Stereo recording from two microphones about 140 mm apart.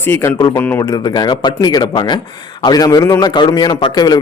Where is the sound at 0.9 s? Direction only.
30° left (ahead or behind).